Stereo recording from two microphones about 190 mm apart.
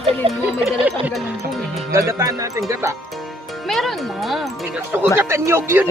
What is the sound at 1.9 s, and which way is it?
Speech, 15° right (ahead or behind).